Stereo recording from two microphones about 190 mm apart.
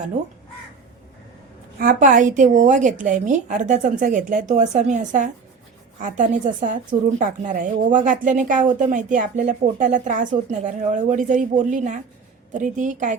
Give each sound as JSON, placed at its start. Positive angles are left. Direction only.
{"t": 1.8, "sound": "a woman's voice", "side_deg": -45}